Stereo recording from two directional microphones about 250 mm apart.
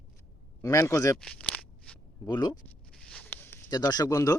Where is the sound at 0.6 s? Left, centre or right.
Centre.